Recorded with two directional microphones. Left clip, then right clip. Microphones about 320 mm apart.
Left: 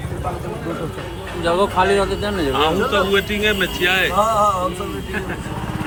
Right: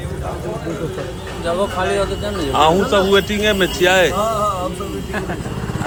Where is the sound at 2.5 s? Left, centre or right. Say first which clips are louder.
Right 5 dB; centre.